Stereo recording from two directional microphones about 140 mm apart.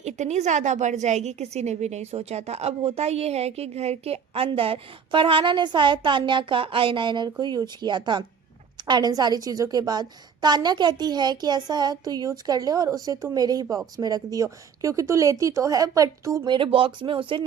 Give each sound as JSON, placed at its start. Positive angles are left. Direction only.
{"t": 0.0, "sound": "a woman's voice", "side_deg": -55}